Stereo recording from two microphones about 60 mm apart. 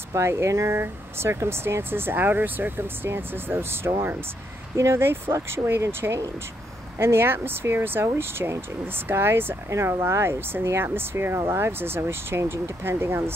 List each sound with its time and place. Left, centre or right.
0.1 s speech: right
9.7 s speech: right